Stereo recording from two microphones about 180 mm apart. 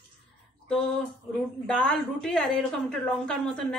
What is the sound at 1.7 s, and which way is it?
A woman's voice, 5° left (ahead or behind).